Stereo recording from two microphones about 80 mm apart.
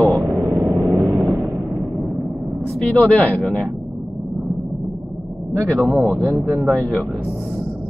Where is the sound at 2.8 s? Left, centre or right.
Centre.